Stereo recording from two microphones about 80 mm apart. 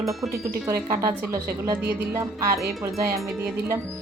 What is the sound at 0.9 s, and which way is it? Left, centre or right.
A woman's voice, right.